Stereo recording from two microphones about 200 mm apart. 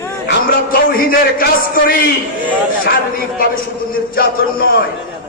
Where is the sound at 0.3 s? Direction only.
45° left (ahead or behind).